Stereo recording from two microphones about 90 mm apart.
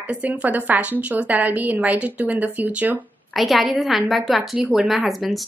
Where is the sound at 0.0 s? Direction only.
15° right (ahead or behind).